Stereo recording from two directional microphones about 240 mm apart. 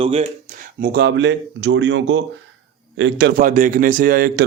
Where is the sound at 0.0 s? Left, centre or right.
Right.